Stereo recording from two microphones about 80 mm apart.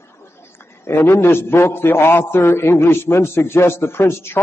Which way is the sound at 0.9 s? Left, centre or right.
Left.